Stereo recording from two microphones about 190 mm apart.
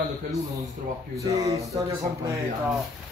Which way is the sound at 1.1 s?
20° right (ahead or behind).